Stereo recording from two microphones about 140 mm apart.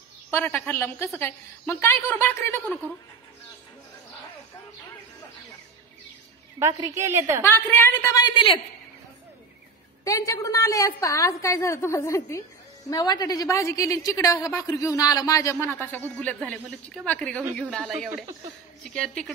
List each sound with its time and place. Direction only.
0.3 s a woman's voice: 15° left (ahead or behind)
6.8 s a woman's voice: 20° right (ahead or behind)
7.4 s a woman's voice: 20° left (ahead or behind)
10.0 s a woman's voice: 20° left (ahead or behind); by 17.9 s 5° left (ahead or behind)
18.9 s speech: 5° left (ahead or behind)